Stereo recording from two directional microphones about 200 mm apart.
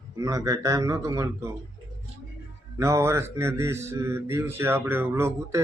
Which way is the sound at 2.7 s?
15° right (ahead or behind).